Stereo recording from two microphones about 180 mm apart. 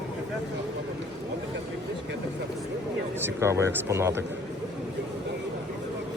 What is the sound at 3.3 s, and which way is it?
Speech, 15° right (ahead or behind).